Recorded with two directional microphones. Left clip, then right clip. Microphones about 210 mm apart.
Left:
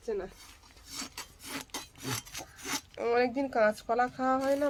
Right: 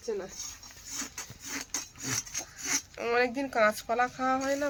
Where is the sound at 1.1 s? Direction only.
55° left (ahead or behind).